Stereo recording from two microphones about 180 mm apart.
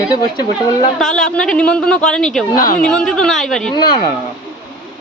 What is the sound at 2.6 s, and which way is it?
Speech, 50° left (ahead or behind).